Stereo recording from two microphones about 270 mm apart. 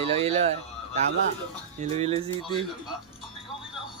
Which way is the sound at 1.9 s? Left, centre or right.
Right.